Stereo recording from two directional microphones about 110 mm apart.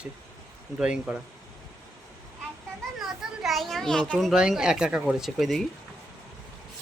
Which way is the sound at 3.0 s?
Centre (ahead or behind).